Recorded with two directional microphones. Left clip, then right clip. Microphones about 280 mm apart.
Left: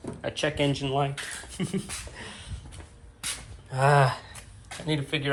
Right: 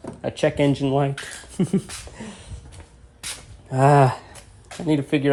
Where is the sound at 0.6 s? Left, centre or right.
Right.